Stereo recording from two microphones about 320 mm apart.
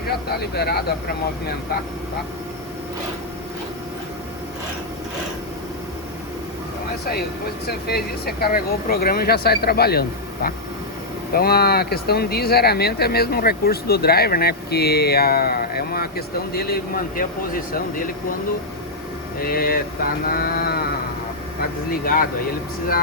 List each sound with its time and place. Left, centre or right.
0.0 s speech: left
7.0 s speech: left
19.4 s speech: left